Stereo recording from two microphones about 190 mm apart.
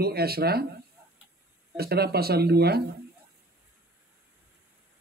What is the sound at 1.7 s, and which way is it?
A man's voice, 55° right (ahead or behind).